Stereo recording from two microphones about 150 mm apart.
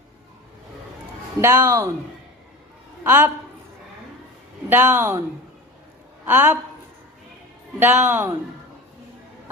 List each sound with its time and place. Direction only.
1.4 s speech: 15° right (ahead or behind)
3.0 s speech: 15° right (ahead or behind)
4.7 s speech: 10° right (ahead or behind)
6.2 s speech: 10° right (ahead or behind)
7.8 s speech: 15° right (ahead or behind)